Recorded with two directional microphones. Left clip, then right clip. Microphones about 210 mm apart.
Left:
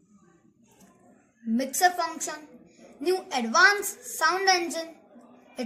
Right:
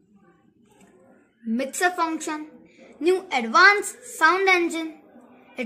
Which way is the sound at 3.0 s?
45° right (ahead or behind).